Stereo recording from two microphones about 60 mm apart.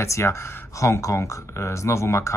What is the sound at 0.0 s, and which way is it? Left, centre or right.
Speech, left.